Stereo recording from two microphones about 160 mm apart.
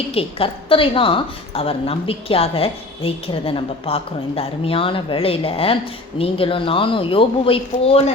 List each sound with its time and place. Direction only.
0.1 s a woman's voice: 35° left (ahead or behind)